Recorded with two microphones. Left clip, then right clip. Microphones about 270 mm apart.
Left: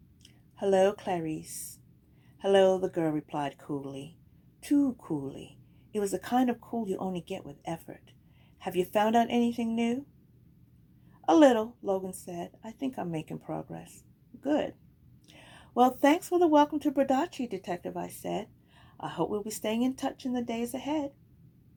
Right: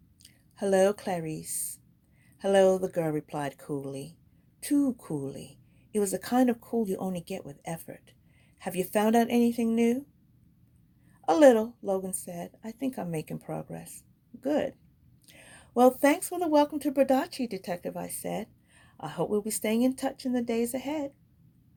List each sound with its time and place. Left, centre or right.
0.5 s speech: right
2.4 s speech: right
11.3 s speech: right
15.3 s a sound: right
15.9 s speech: right